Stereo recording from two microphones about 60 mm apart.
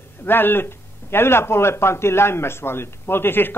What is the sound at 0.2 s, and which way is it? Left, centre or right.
A man's voice, left.